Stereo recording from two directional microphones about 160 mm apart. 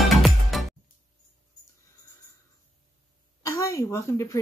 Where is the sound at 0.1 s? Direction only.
Centre (ahead or behind).